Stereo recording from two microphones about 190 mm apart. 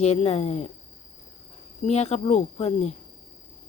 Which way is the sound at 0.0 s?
35° left (ahead or behind).